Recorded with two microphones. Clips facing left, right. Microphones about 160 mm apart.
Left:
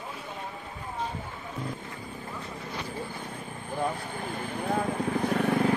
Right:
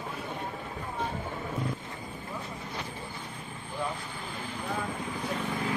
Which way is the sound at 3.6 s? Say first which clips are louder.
Left 4 dB; 50° left (ahead or behind).